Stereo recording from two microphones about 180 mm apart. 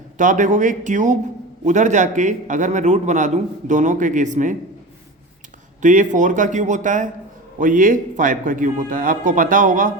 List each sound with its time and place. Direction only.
0.2 s a man's voice: 45° right (ahead or behind)
5.8 s a man's voice: 45° right (ahead or behind)